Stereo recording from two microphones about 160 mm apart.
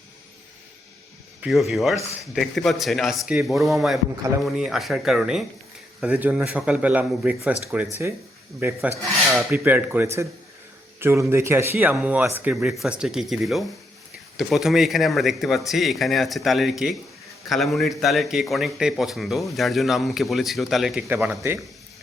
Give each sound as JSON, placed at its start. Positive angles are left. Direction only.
{"t": 1.4, "sound": "a man's voice", "side_deg": 0}
{"t": 21.4, "sound": "a man's voice", "side_deg": -15}